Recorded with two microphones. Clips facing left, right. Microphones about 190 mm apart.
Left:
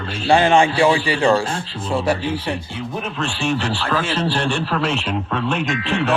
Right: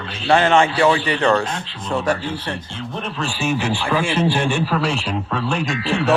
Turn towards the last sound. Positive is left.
turn(degrees=-5)  # may be behind; listen again after turning